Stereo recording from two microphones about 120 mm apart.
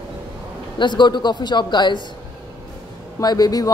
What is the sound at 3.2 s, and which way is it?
Speech, 30° left (ahead or behind).